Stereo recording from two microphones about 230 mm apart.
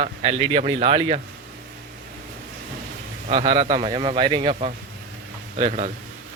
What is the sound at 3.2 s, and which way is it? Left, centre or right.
Speech, right.